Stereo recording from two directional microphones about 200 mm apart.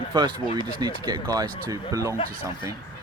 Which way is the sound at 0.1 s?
20° right (ahead or behind).